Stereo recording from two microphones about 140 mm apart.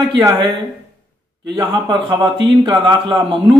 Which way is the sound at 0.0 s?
20° right (ahead or behind).